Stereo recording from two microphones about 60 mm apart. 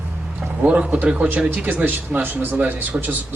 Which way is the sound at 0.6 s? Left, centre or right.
Right.